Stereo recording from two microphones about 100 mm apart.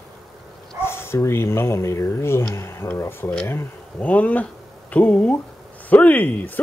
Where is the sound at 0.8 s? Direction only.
25° left (ahead or behind).